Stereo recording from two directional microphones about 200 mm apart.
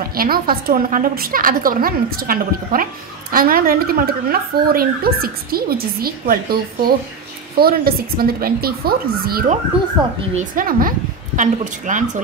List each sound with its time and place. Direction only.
0.0 s a woman's voice: 45° right (ahead or behind)
10.0 s a woman's voice: 20° right (ahead or behind)
10.3 s a woman's voice: 45° right (ahead or behind)